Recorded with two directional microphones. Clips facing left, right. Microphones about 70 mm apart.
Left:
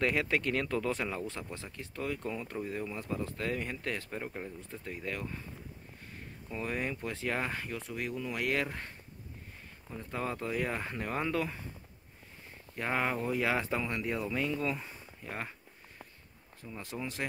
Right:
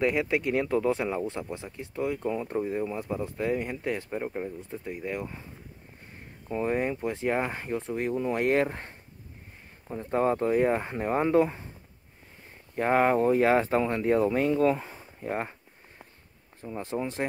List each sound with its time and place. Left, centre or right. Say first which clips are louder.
0.0 s speech: right 5 dB; centre
6.5 s speech: right 8 dB; right
12.7 s speech: right 10 dB; right
16.6 s speech: right 8 dB; right